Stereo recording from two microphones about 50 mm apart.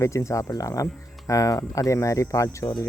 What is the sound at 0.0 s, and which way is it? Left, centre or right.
Speech, left.